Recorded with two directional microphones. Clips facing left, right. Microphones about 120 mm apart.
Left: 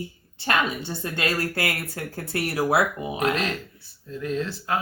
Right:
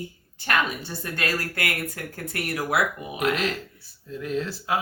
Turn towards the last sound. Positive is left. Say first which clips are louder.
# even
turn(degrees=-5)  # may be behind; listen again after turning